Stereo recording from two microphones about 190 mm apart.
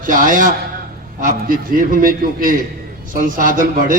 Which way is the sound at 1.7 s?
45° right (ahead or behind).